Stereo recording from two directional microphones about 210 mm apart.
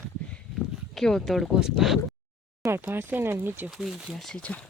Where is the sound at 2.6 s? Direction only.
10° right (ahead or behind).